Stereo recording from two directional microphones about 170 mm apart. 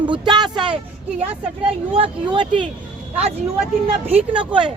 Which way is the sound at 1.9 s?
30° right (ahead or behind).